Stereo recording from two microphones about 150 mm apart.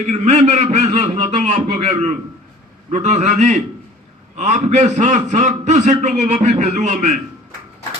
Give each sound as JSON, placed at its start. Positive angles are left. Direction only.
{"t": 0.1, "sound": "a man's voice", "side_deg": -50}